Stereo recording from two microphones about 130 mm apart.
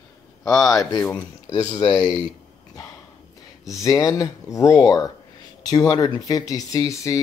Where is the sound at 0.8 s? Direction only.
25° left (ahead or behind).